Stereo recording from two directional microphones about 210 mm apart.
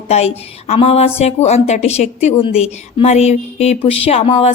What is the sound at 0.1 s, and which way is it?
A woman's voice, 30° left (ahead or behind).